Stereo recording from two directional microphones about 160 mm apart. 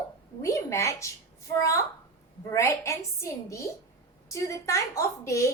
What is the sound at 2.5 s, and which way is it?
A woman's voice, 20° left (ahead or behind).